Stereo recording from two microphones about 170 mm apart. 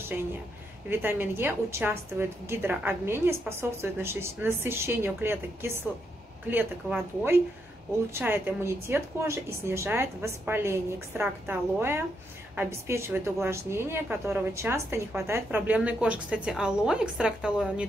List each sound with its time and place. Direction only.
0.8 s a woman's voice: 10° right (ahead or behind)